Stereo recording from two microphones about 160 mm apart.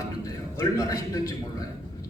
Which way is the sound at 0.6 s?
20° left (ahead or behind).